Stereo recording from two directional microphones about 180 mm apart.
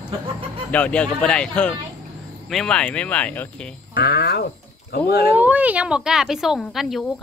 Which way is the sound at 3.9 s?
60° left (ahead or behind).